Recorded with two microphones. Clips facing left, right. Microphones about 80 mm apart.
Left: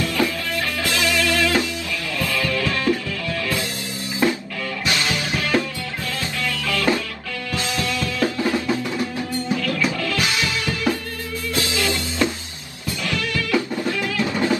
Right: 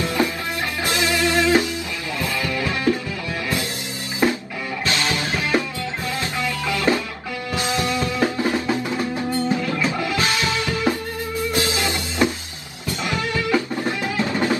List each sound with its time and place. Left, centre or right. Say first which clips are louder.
0.0 s music: even; right
4.8 s music: right 1 dB; right